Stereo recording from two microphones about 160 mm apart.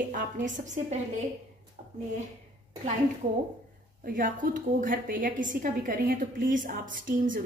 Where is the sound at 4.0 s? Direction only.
55° right (ahead or behind).